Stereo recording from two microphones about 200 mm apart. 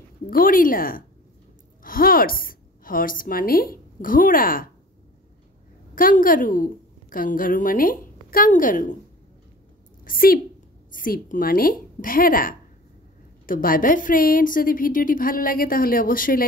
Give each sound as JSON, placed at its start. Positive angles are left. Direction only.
{"t": 0.3, "sound": "a woman's voice", "side_deg": 45}
{"t": 5.9, "sound": "a woman's voice", "side_deg": 45}
{"t": 10.0, "sound": "a woman's voice", "side_deg": 45}